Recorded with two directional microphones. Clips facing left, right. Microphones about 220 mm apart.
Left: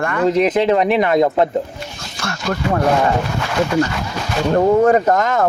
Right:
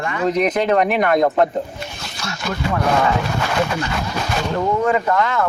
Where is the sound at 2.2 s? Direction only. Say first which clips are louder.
Left 4 dB; 55° left (ahead or behind).